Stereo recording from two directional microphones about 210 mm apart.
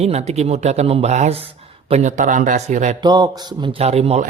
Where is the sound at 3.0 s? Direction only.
20° right (ahead or behind).